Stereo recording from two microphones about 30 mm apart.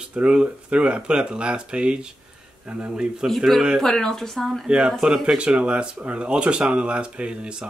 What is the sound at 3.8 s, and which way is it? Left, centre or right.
Speech, centre.